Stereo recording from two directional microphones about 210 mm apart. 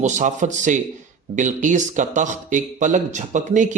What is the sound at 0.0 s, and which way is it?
Speech, 35° right (ahead or behind).